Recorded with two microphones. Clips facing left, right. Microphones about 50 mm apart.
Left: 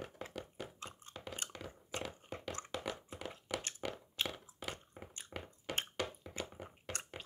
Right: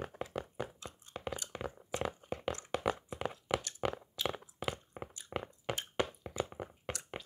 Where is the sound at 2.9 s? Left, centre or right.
Right.